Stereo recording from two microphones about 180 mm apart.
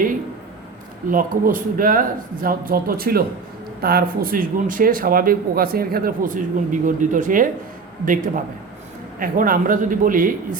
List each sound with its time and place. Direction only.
1.1 s speech: 50° right (ahead or behind)
9.1 s speech: 50° right (ahead or behind)